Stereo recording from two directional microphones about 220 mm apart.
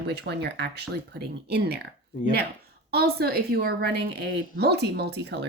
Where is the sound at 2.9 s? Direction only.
45° right (ahead or behind).